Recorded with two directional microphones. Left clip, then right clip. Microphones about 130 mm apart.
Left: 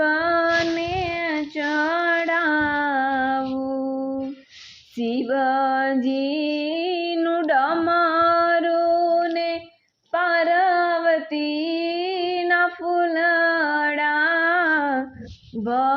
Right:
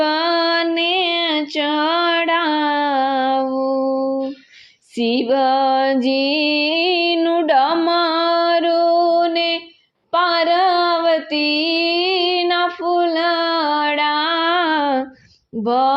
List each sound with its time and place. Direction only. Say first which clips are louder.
0.0 s female singing: right 3 dB; 40° right (ahead or behind)
0.8 s female singing: right 7 dB; 65° right (ahead or behind); by 3.4 s 45° right (ahead or behind)
3.6 s music: right 8 dB; 20° right (ahead or behind)
4.9 s music: right 6 dB; 40° right (ahead or behind)
10.1 s female singing: right 4 dB; 45° right (ahead or behind)
15.7 s a sound: right 4 dB; 40° right (ahead or behind)